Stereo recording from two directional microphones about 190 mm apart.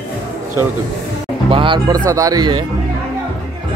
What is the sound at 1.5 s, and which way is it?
Speech, 25° right (ahead or behind).